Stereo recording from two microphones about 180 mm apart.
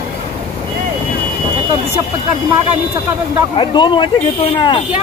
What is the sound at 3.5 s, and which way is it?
Speech, 25° left (ahead or behind).